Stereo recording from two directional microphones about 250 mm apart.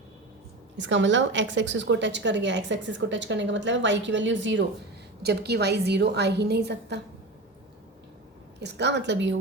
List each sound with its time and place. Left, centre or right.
0.8 s a woman's voice: right
8.6 s a woman's voice: right